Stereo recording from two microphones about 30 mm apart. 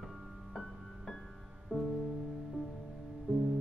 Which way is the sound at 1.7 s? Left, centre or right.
Right.